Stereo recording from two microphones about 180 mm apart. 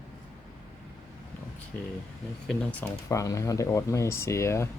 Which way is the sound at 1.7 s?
5° left (ahead or behind).